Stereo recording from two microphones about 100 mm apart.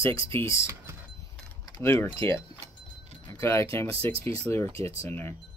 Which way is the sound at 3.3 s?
30° left (ahead or behind).